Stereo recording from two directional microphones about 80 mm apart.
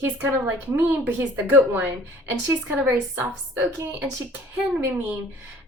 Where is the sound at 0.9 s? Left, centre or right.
Right.